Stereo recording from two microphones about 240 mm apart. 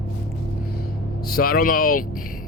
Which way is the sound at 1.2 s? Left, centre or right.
Left.